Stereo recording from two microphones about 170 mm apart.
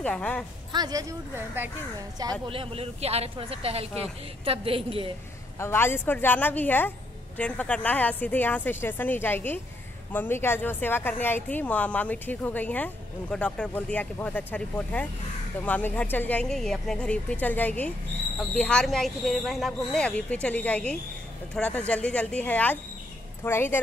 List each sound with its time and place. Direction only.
0.0 s a woman's voice: 5° left (ahead or behind)
0.7 s speech: 25° right (ahead or behind)
1.3 s speech: 10° right (ahead or behind)
2.4 s speech: 30° right (ahead or behind)
5.6 s a woman's voice: 15° left (ahead or behind)